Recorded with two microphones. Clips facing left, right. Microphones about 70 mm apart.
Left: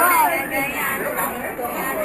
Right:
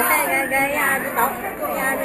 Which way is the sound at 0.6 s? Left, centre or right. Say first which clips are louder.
Right 4 dB; right.